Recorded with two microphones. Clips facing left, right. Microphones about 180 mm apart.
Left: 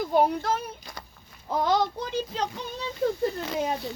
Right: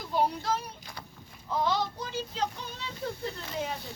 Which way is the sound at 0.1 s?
55° left (ahead or behind).